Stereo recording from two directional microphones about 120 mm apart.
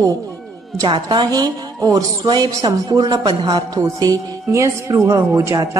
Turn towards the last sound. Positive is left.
turn(degrees=-25)  # may be behind; listen again after turning